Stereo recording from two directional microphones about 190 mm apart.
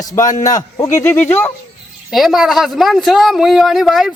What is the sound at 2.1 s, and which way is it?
Speech, centre (ahead or behind).